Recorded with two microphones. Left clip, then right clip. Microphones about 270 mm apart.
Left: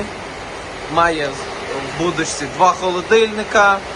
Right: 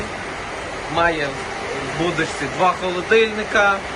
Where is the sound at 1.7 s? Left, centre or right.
Centre.